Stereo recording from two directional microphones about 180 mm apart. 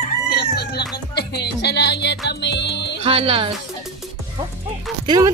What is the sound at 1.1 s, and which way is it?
Music, 65° left (ahead or behind).